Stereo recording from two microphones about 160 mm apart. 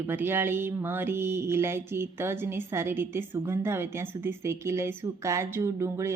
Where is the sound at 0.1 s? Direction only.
15° right (ahead or behind).